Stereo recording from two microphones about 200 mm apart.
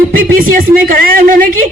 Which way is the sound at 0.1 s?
45° right (ahead or behind).